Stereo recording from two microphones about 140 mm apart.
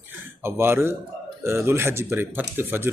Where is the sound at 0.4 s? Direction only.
15° right (ahead or behind).